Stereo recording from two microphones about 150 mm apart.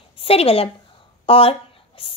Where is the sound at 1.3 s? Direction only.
40° left (ahead or behind).